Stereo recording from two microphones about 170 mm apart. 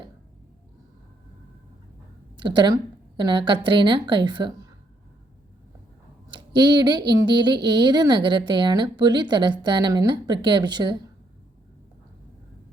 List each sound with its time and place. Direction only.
2.4 s a woman's voice: 25° right (ahead or behind)
6.3 s a woman's voice: 25° right (ahead or behind)